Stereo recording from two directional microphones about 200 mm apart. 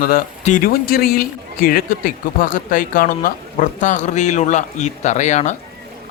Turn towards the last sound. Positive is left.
turn(degrees=35)  # may be behind; listen again after turning